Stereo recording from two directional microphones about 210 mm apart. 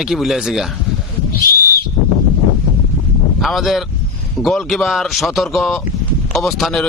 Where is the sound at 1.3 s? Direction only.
45° left (ahead or behind).